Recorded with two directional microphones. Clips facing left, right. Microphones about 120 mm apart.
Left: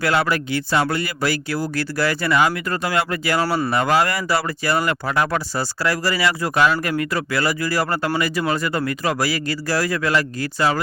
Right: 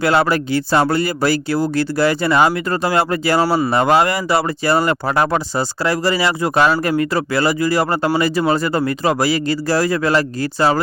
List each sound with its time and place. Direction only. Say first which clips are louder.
0.0 s speech: right 4 dB; 30° right (ahead or behind)